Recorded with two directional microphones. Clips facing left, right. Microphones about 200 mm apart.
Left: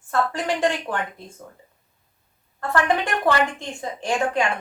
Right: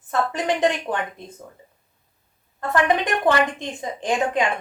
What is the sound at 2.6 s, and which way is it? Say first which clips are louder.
A woman's voice: right 1 dB; 20° right (ahead or behind).